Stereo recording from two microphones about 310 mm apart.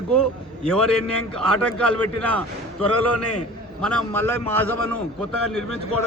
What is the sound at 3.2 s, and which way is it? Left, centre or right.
Speech, left.